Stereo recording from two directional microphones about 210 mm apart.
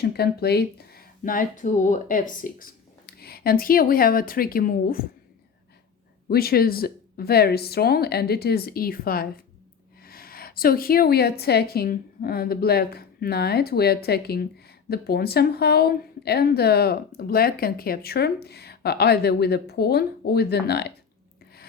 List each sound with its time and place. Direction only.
0.0 s a woman's voice: 50° left (ahead or behind)
6.2 s a woman's voice: 45° left (ahead or behind)